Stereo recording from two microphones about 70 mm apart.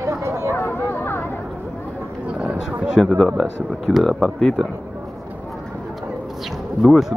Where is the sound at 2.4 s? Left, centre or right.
Centre.